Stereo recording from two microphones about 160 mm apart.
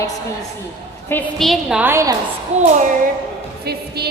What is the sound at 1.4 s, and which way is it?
Speech, centre (ahead or behind).